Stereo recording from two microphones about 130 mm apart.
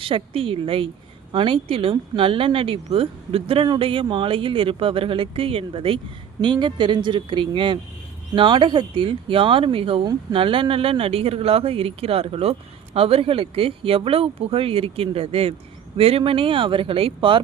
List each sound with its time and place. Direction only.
0.0 s speech: 45° right (ahead or behind)